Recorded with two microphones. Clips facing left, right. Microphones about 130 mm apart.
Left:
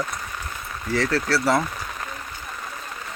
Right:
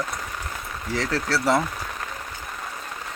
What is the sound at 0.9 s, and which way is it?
Speech, 15° right (ahead or behind).